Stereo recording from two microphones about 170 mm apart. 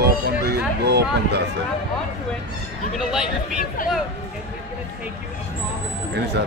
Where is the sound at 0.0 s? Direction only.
70° right (ahead or behind).